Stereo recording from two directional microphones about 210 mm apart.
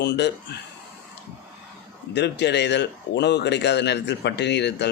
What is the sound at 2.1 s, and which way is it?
Speech, 55° left (ahead or behind).